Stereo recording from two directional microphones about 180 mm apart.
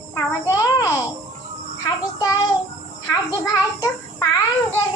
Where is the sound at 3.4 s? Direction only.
15° left (ahead or behind).